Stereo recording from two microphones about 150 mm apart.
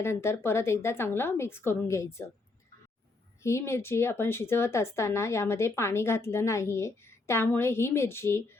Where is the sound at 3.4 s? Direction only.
20° left (ahead or behind).